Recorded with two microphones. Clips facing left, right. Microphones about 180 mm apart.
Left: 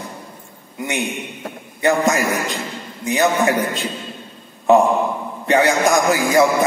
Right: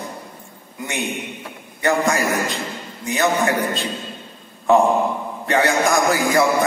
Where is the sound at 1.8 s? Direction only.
20° left (ahead or behind).